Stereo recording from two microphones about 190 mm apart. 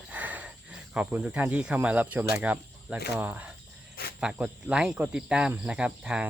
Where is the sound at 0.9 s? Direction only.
5° right (ahead or behind).